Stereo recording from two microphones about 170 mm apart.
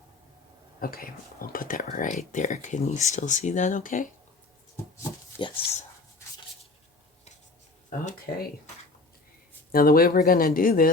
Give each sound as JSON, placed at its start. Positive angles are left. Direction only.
{"t": 0.8, "sound": "speech", "side_deg": 55}
{"t": 5.3, "sound": "a sound", "side_deg": 15}
{"t": 7.9, "sound": "speech", "side_deg": 50}
{"t": 9.7, "sound": "speech", "side_deg": 60}